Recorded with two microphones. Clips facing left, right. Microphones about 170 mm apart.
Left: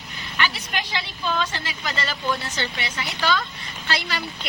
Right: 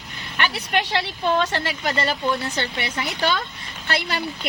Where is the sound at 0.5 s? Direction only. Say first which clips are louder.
Right 6 dB; 65° right (ahead or behind).